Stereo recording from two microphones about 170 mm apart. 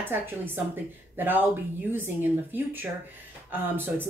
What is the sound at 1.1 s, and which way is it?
Speech, 10° right (ahead or behind).